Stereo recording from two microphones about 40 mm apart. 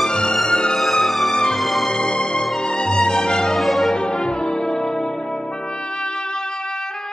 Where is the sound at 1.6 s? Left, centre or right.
Centre.